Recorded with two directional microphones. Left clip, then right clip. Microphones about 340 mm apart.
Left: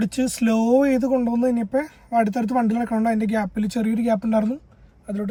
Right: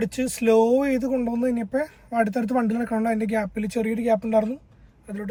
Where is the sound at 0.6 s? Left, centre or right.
Centre.